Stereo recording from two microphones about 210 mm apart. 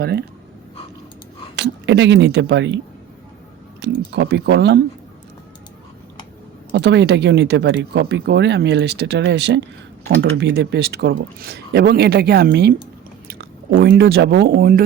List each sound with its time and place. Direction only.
0.0 s speech: 50° right (ahead or behind)
1.5 s speech: 55° right (ahead or behind)
6.7 s speech: 55° right (ahead or behind)